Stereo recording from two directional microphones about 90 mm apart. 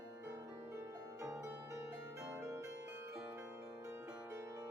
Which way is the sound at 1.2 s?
30° right (ahead or behind).